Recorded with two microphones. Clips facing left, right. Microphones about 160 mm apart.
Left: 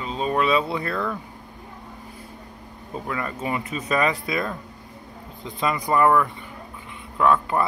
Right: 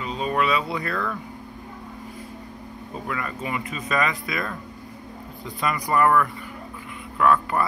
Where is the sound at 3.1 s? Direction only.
30° left (ahead or behind).